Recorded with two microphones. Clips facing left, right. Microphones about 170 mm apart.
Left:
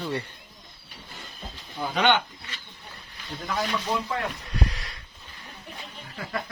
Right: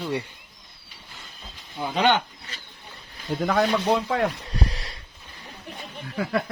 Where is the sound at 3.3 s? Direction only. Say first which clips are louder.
Right 8 dB; 55° right (ahead or behind).